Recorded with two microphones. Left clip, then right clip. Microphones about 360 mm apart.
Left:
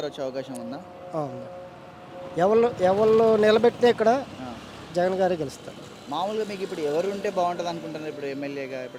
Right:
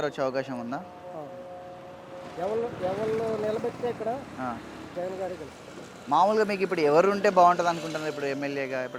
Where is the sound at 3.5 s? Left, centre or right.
Left.